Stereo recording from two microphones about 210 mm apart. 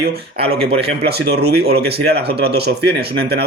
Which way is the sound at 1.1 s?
50° right (ahead or behind).